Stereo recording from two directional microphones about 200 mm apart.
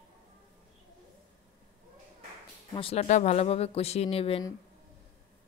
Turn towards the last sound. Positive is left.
turn(degrees=30)  # may be behind; listen again after turning